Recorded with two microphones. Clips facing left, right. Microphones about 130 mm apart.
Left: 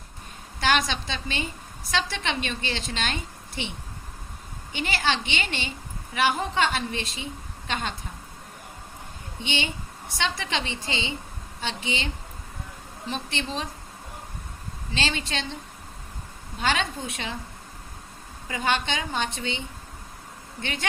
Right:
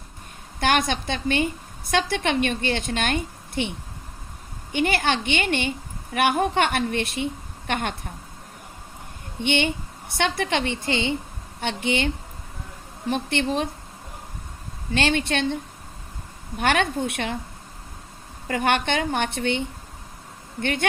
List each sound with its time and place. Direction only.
0.6 s a woman's voice: 50° right (ahead or behind)
4.7 s a woman's voice: 55° right (ahead or behind)
9.4 s a woman's voice: 55° right (ahead or behind)
14.9 s a woman's voice: 55° right (ahead or behind)
16.6 s a woman's voice: 60° right (ahead or behind)
18.4 s a woman's voice: 60° right (ahead or behind)